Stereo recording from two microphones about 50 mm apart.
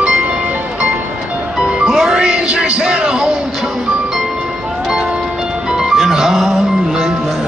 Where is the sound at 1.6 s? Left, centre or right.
Centre.